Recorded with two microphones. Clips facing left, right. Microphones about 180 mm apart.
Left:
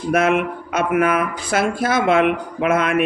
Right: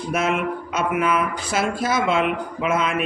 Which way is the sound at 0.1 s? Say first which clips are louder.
Left 5 dB; 55° left (ahead or behind).